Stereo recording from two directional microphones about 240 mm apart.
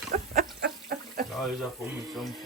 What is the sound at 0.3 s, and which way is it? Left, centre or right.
Chicken, right.